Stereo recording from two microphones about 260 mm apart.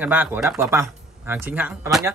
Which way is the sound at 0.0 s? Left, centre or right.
Centre.